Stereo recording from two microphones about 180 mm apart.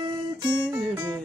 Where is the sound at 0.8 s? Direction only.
5° right (ahead or behind).